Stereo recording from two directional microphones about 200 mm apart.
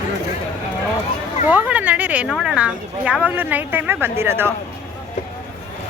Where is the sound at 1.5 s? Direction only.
5° right (ahead or behind).